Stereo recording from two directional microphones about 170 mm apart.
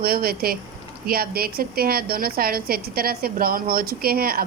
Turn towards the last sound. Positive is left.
turn(degrees=-60)  # may be behind; listen again after turning